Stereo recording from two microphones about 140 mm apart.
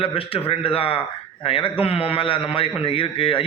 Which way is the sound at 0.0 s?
40° left (ahead or behind).